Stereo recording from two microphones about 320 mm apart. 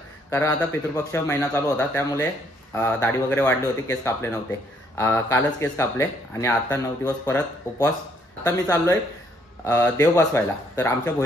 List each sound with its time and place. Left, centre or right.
0.3 s speech: centre